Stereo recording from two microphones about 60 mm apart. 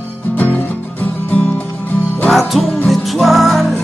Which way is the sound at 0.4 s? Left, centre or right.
Left.